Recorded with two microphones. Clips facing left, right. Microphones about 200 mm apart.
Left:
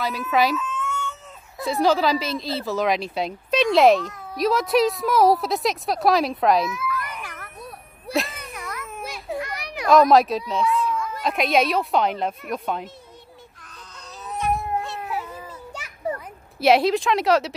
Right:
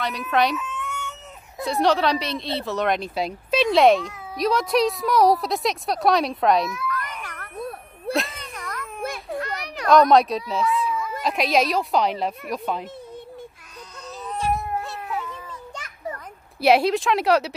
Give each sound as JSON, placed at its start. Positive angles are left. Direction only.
{"t": 0.3, "sound": "a woman's voice", "side_deg": 0}
{"t": 0.6, "sound": "cat", "side_deg": -15}
{"t": 1.6, "sound": "a woman's voice", "side_deg": 0}
{"t": 8.1, "sound": "cat", "side_deg": 0}
{"t": 9.3, "sound": "a child's voice", "side_deg": 10}
{"t": 14.8, "sound": "music", "side_deg": 5}
{"t": 16.5, "sound": "a woman's voice", "side_deg": 0}